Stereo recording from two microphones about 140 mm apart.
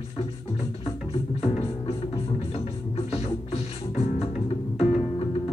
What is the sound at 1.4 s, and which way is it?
Music, 40° left (ahead or behind).